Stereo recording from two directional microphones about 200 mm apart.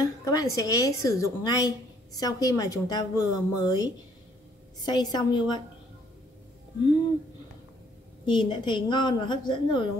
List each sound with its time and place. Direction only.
0.0 s a woman's voice: 20° left (ahead or behind)
8.3 s a woman's voice: 25° left (ahead or behind)